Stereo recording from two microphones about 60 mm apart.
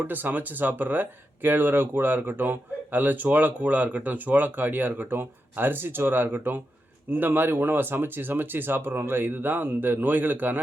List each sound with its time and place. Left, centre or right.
0.0 s speech: right